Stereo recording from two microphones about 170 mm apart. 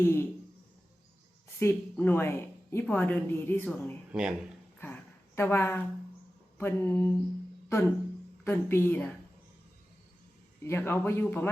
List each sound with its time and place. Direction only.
0.0 s a woman's voice: 15° left (ahead or behind)
1.5 s a woman's voice: 15° left (ahead or behind)
4.1 s speech: 5° right (ahead or behind)
4.8 s a sound: 15° left (ahead or behind)
6.6 s a woman's voice: 15° left (ahead or behind)
10.6 s a woman's voice: 15° left (ahead or behind)